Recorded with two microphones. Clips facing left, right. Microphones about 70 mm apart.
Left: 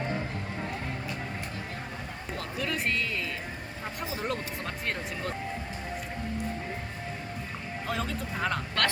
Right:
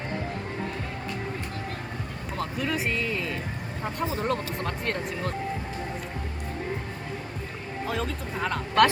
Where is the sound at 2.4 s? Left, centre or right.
Centre.